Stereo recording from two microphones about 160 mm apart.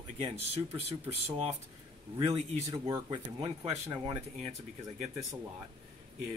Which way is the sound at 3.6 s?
40° right (ahead or behind).